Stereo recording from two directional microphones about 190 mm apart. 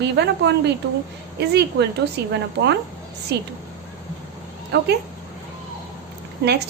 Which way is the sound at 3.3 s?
60° right (ahead or behind).